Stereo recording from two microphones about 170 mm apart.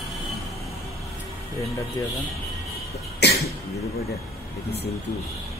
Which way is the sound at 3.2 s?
80° left.